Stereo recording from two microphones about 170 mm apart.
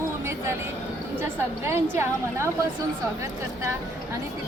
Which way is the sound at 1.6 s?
15° right (ahead or behind).